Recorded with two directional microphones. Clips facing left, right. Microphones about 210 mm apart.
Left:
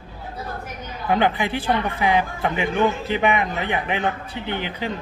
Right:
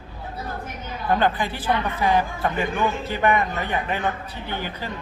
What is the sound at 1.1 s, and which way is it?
Speech, 15° left (ahead or behind).